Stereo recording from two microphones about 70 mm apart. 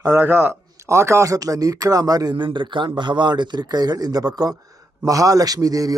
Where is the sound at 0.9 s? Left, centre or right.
Right.